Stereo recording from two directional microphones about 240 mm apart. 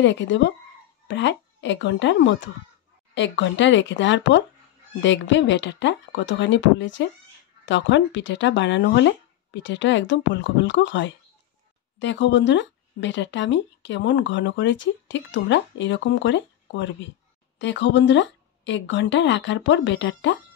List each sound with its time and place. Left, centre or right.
0.0 s speech: left